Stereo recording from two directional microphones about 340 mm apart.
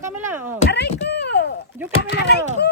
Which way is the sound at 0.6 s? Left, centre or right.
Left.